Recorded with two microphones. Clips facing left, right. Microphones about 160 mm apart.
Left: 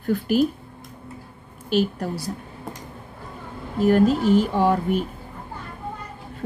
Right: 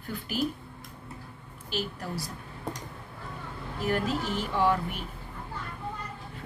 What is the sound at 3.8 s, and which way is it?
Speech, 40° left (ahead or behind).